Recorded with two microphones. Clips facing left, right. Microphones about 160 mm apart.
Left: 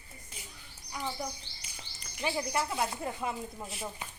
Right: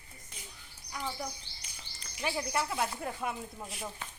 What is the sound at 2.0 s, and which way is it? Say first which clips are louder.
Speech: left 2 dB; 5° left (ahead or behind).